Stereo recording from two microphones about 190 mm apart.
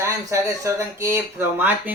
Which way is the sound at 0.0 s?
15° right (ahead or behind).